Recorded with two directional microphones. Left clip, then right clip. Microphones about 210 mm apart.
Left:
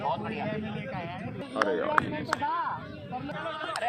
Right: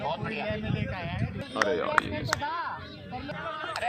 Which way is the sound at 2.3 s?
50° right (ahead or behind).